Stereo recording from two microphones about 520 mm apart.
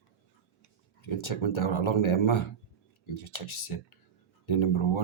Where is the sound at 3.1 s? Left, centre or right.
Left.